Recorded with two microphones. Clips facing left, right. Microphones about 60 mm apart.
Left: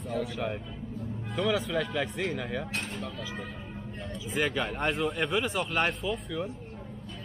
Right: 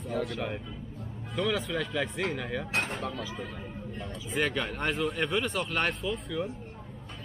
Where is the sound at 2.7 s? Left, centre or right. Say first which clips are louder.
Right 4 dB; right.